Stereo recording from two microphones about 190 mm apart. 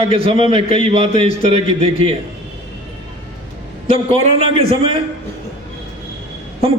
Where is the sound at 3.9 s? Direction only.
30° right (ahead or behind).